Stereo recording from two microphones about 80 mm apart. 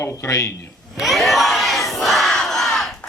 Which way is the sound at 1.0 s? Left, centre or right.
Centre.